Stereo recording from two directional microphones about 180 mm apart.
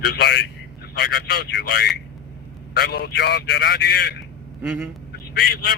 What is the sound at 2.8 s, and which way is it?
A man's voice, 65° left (ahead or behind).